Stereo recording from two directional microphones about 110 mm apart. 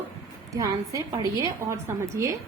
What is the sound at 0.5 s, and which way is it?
A woman's voice, 30° right (ahead or behind).